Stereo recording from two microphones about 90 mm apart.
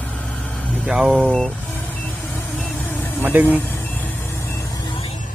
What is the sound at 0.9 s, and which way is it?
Vehicle, 10° right (ahead or behind).